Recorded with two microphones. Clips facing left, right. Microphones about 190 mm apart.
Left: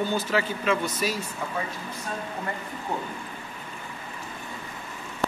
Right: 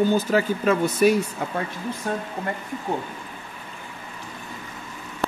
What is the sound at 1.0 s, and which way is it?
Speech, 55° right (ahead or behind).